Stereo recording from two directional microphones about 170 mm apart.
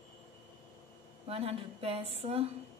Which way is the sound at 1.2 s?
35° right (ahead or behind).